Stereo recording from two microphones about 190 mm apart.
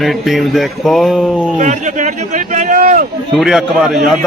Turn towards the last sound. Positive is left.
turn(degrees=0)  # may be behind; listen again after turning